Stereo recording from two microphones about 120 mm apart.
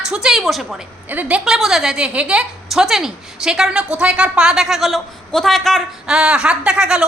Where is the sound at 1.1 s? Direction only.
15° right (ahead or behind).